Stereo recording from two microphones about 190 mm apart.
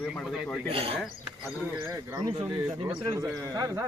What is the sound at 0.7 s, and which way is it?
Speech, 30° right (ahead or behind).